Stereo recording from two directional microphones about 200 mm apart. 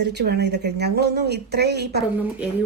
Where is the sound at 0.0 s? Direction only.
55° right (ahead or behind).